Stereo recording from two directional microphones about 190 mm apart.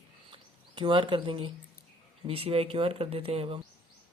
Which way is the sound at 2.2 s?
30° right (ahead or behind).